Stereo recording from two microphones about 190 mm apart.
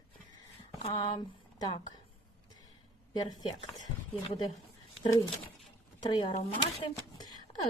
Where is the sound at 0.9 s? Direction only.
30° left (ahead or behind).